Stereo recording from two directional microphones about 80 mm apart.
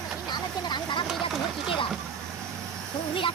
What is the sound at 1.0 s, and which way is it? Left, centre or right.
Vehicle, centre.